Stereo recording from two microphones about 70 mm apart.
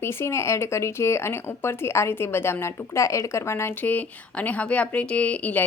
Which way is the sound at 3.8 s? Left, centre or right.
Left.